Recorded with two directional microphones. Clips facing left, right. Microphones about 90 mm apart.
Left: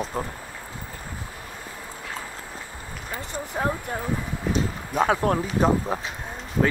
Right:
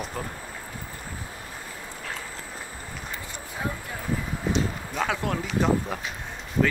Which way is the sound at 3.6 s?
45° left (ahead or behind).